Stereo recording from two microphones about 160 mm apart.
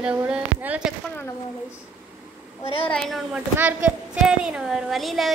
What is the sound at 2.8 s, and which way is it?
Speech, 5° left (ahead or behind).